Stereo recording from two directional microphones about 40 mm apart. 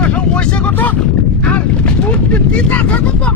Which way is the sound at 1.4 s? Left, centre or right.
Left.